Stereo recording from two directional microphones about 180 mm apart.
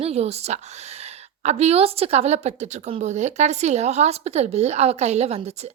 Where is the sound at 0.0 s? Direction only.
35° right (ahead or behind).